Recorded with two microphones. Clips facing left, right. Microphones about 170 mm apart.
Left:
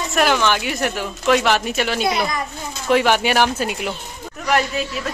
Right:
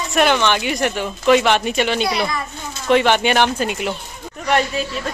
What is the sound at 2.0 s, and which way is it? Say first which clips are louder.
Speech: even; 20° left (ahead or behind).